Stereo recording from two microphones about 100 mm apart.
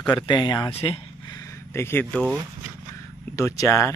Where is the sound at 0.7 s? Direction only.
75° left (ahead or behind).